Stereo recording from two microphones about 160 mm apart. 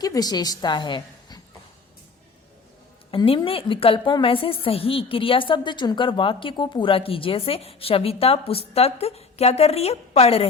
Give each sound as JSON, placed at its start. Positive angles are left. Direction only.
{"t": 0.0, "sound": "a woman's voice", "side_deg": 25}
{"t": 3.1, "sound": "a woman's voice", "side_deg": 35}